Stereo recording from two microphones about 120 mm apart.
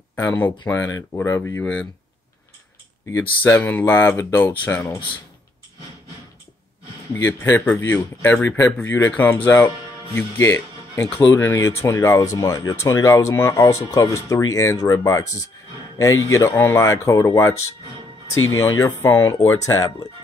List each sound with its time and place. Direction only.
0.1 s speech: 15° left (ahead or behind)
3.1 s speech: 20° left (ahead or behind)
7.2 s speech: 20° left (ahead or behind)